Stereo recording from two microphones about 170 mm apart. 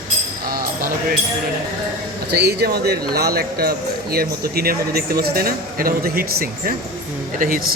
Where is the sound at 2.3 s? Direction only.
70° right (ahead or behind).